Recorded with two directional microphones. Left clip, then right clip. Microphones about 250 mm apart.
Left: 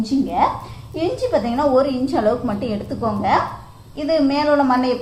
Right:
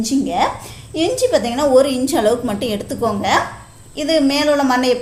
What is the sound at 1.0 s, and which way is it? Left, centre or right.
A woman's voice, right.